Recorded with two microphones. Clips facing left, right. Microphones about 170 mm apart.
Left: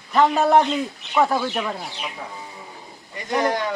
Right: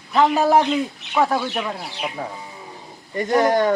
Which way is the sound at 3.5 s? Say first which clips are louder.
Right 7 dB; 45° right (ahead or behind).